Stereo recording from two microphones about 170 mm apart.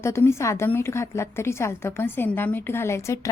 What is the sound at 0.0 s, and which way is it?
A woman's voice, 15° left (ahead or behind).